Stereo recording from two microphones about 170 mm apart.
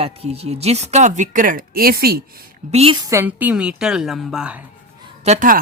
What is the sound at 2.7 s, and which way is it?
Speech, 35° right (ahead or behind).